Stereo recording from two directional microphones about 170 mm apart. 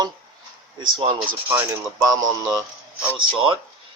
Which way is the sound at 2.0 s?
20° right (ahead or behind).